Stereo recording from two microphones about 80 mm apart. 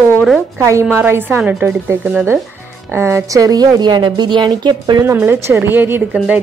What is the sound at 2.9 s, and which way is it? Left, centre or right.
A woman's voice, right.